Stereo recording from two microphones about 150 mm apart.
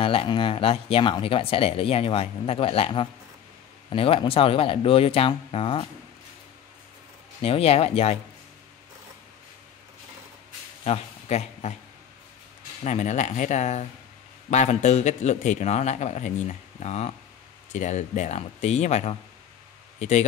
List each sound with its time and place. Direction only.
0.0 s speech: 40° left (ahead or behind)
7.4 s a man's voice: 40° left (ahead or behind)
10.8 s a sound: 45° left (ahead or behind)
12.8 s a man's voice: 50° left (ahead or behind)